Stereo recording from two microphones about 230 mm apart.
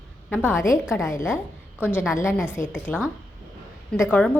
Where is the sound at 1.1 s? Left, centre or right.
Centre.